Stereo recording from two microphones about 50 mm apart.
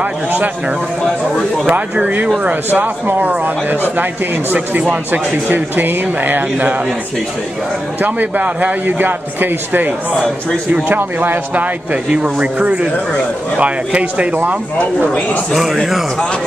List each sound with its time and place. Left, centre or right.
1.0 s speech: centre
1.7 s speech: right
2.7 s speech: right
8.0 s speech: right
11.5 s speech: right
14.3 s speech: right
15.5 s a man's voice: centre